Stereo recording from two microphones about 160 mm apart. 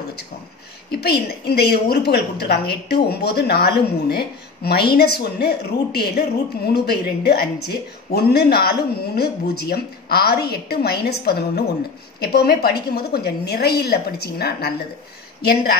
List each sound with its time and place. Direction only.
0.8 s a woman's voice: 80° left